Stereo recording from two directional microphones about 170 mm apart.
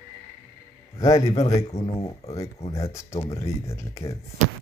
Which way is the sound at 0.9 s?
20° left (ahead or behind).